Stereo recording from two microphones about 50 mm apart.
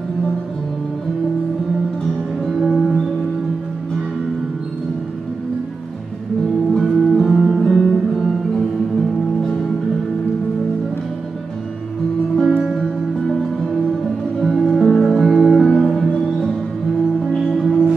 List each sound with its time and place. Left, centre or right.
2.4 s music: centre
6.8 s music: centre
7.7 s music: centre
8.2 s music: centre
12.4 s music: centre
17.6 s music: centre